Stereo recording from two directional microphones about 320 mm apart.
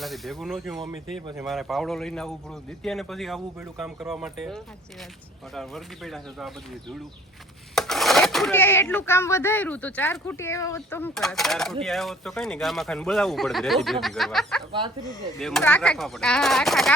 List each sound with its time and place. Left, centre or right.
0.0 s speech: centre
7.8 s speech: centre